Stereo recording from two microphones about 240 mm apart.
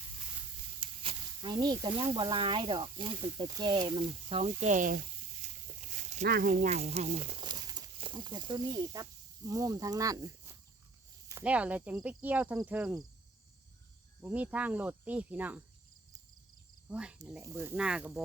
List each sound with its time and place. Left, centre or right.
0.8 s speech: right
14.2 s speech: centre
16.9 s speech: centre